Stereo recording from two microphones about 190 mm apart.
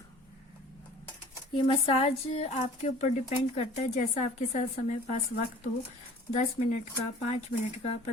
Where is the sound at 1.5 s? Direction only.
30° left (ahead or behind).